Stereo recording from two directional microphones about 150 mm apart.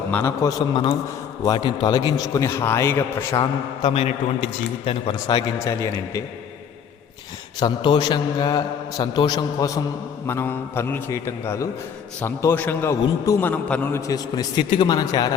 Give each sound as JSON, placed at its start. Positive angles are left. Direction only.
{"t": 0.1, "sound": "a man's voice", "side_deg": 15}
{"t": 0.7, "sound": "a man's voice", "side_deg": 30}
{"t": 3.9, "sound": "a man's voice", "side_deg": 45}
{"t": 5.3, "sound": "a man's voice", "side_deg": 20}
{"t": 7.6, "sound": "a man's voice", "side_deg": 30}
{"t": 14.1, "sound": "a man's voice", "side_deg": 25}